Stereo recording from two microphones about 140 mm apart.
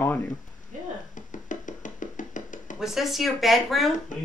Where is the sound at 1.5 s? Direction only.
65° left (ahead or behind).